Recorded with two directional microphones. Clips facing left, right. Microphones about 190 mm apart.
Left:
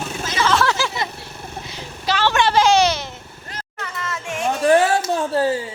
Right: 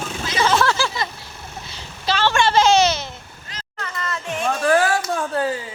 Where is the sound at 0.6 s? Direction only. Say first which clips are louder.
Even; 20° left (ahead or behind).